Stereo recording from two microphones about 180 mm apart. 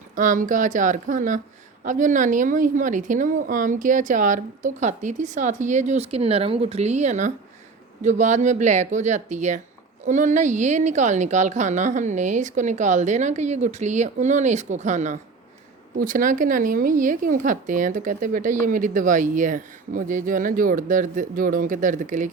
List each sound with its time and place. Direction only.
0.2 s a woman's voice: 45° right (ahead or behind)